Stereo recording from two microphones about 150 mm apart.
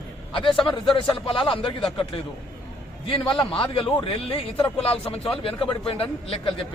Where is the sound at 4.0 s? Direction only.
35° left (ahead or behind).